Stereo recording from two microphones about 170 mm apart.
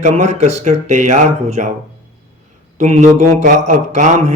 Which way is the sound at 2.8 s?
40° right (ahead or behind).